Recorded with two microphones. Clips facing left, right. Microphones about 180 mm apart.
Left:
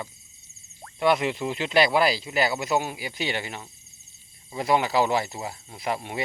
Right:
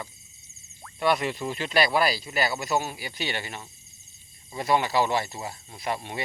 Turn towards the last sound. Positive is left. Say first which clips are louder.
# left 2 dB
turn(degrees=15)  # may be behind; listen again after turning